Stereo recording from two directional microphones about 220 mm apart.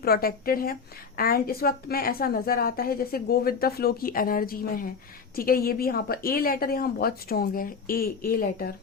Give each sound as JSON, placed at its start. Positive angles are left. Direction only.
{"t": 0.0, "sound": "a woman's voice", "side_deg": 45}